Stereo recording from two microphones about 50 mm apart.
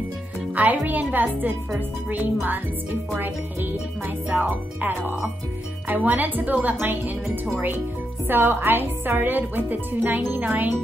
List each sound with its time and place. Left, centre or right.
0.6 s speech: right
4.3 s speech: right
8.3 s speech: right